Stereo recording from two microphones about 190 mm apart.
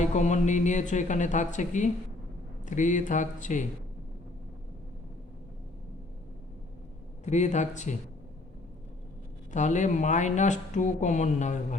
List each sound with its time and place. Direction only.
0.0 s speech: 40° left (ahead or behind)
7.3 s speech: 40° left (ahead or behind)
9.5 s speech: 40° left (ahead or behind)